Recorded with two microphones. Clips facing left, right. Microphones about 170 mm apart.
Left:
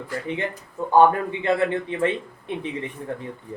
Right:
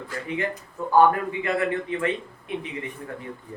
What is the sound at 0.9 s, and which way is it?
Speech, 25° left (ahead or behind).